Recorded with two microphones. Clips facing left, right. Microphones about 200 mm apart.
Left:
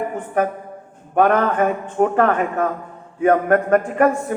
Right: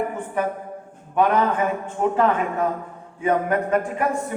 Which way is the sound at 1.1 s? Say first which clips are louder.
Left 3 dB; 55° left (ahead or behind).